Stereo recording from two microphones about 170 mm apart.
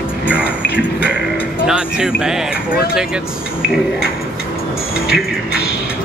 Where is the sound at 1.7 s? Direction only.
5° right (ahead or behind).